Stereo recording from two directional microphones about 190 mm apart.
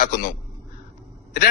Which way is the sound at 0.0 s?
50° left (ahead or behind).